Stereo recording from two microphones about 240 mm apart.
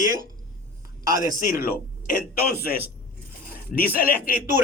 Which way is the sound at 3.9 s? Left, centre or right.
Left.